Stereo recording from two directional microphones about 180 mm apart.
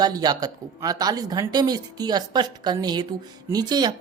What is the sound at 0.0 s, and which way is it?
A woman's voice, 20° right (ahead or behind).